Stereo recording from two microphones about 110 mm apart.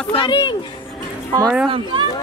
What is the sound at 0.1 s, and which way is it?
Speech, 50° left (ahead or behind).